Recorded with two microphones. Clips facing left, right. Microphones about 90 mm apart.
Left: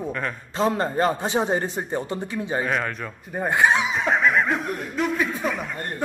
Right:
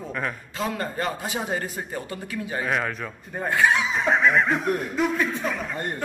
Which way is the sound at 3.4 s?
20° left (ahead or behind).